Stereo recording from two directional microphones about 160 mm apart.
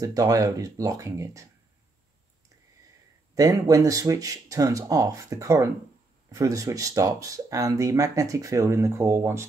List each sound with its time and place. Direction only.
0.0 s speech: 20° right (ahead or behind)
3.3 s speech: 20° right (ahead or behind)